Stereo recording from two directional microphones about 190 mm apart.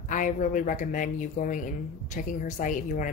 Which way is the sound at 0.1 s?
40° left (ahead or behind).